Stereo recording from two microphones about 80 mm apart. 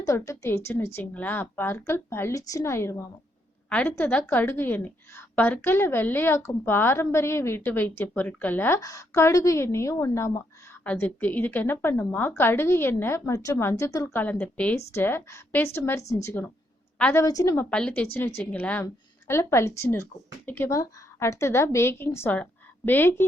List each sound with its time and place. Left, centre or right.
0.0 s a woman's voice: left
2.3 s a woman's voice: left
3.7 s a woman's voice: left
8.8 s a woman's voice: left
10.8 s a woman's voice: left
14.1 s a woman's voice: left
14.8 s a woman's voice: left
17.2 s a woman's voice: left
17.7 s a woman's voice: centre
18.1 s a woman's voice: left
20.7 s a woman's voice: left